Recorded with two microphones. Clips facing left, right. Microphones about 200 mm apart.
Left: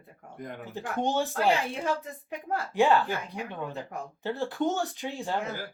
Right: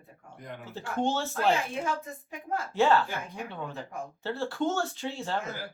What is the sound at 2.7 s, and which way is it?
Speech, 15° left (ahead or behind).